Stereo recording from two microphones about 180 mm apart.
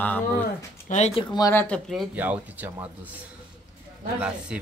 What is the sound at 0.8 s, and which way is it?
Speech, 40° left (ahead or behind).